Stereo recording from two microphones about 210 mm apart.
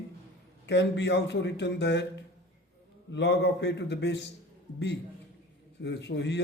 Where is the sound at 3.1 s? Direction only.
55° left (ahead or behind).